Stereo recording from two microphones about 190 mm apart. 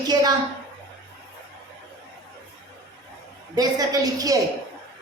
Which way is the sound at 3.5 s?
20° right (ahead or behind).